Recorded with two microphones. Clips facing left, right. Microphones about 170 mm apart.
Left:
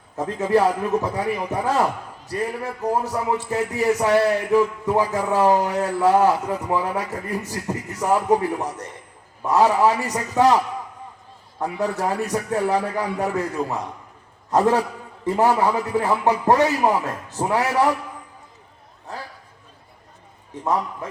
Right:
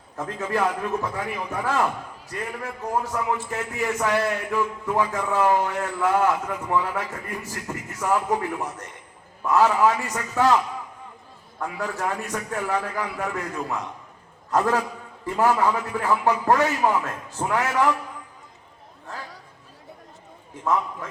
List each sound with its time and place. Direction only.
0.4 s a man's voice: 35° left (ahead or behind)
11.6 s a man's voice: 35° left (ahead or behind)
20.7 s a man's voice: 35° left (ahead or behind)